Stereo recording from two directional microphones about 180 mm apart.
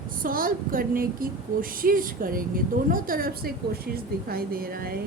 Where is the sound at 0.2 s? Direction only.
50° right (ahead or behind).